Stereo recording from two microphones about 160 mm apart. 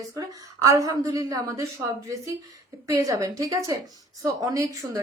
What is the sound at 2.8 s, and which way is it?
Speech, 20° right (ahead or behind).